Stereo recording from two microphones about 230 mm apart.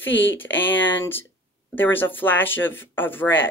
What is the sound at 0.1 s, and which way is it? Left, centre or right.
Speech, left.